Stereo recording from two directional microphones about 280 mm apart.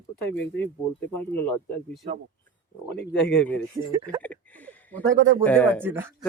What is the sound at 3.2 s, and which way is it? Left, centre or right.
Speech, centre.